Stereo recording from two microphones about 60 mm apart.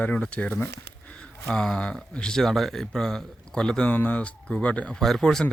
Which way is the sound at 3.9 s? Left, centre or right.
Left.